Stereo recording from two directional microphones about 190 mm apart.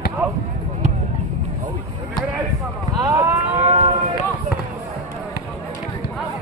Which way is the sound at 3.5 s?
35° right (ahead or behind).